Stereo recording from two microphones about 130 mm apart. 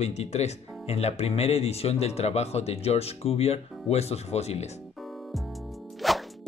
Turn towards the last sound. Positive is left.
turn(degrees=0)  # may be behind; listen again after turning